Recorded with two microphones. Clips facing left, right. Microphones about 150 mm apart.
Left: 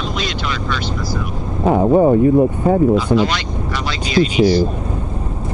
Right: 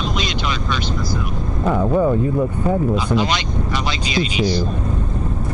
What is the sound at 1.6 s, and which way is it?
Speech, 50° left (ahead or behind).